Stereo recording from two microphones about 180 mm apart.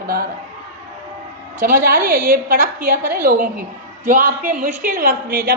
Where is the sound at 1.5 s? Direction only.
50° right (ahead or behind).